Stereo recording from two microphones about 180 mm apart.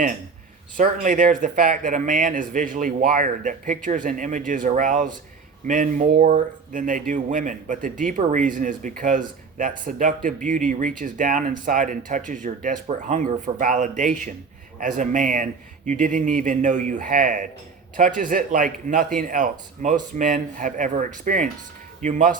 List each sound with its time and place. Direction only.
0.8 s speech: 45° right (ahead or behind)